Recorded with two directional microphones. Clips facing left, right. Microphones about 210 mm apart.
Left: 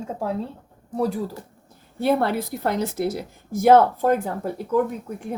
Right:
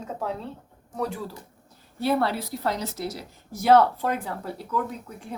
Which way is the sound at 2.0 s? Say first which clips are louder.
Left 3 dB; 50° left (ahead or behind).